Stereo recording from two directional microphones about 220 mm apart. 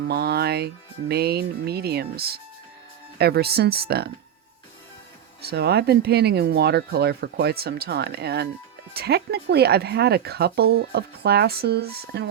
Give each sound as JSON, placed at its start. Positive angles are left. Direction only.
{"t": 0.0, "sound": "speech", "side_deg": -45}
{"t": 5.4, "sound": "speech", "side_deg": -45}